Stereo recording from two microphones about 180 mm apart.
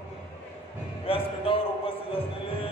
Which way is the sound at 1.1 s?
30° left (ahead or behind).